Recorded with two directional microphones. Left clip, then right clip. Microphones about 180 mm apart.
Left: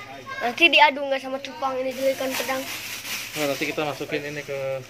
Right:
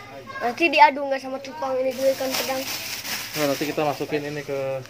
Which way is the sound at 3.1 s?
60° right (ahead or behind).